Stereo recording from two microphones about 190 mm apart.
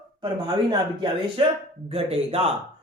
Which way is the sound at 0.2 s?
25° right (ahead or behind).